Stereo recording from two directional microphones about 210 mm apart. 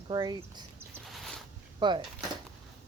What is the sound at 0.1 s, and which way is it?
Speech, 20° right (ahead or behind).